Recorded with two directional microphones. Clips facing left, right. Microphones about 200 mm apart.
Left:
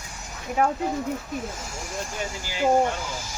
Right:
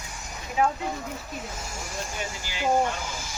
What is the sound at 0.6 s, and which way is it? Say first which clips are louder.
Speech: left 1 dB; 50° left (ahead or behind).